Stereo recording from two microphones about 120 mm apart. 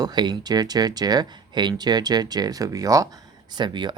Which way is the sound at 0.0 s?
35° right (ahead or behind).